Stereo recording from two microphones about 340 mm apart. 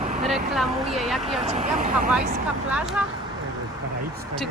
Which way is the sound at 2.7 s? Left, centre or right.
Centre.